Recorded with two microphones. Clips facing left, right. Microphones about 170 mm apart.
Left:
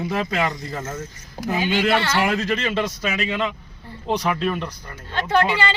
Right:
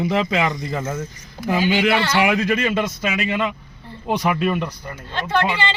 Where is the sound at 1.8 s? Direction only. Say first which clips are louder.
Right 2 dB; 15° right (ahead or behind).